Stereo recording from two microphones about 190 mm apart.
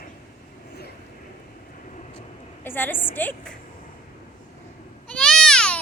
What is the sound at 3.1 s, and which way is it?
Speech, 10° left (ahead or behind).